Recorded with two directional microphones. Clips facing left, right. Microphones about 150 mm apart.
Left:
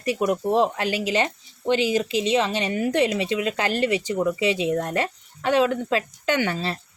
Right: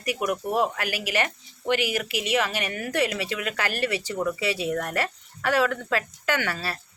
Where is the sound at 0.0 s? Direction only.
25° left (ahead or behind).